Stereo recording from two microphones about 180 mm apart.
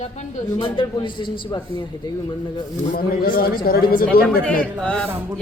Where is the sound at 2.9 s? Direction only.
50° left (ahead or behind).